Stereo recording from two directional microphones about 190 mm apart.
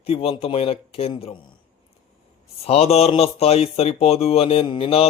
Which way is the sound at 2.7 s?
35° left (ahead or behind).